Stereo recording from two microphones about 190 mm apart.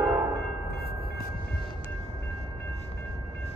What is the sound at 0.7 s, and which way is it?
Train, 55° left (ahead or behind).